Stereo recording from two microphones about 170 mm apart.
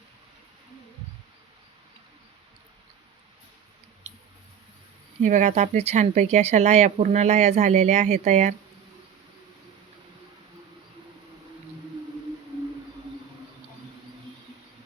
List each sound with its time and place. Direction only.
5.2 s speech: 45° right (ahead or behind)